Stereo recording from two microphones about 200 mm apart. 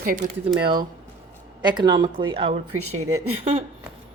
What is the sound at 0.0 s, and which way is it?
Speech, 45° right (ahead or behind).